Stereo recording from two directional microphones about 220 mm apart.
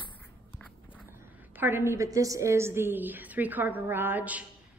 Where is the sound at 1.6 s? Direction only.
10° right (ahead or behind).